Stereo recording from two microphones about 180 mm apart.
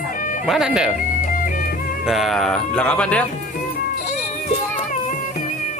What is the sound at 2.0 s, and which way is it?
Speech, centre (ahead or behind).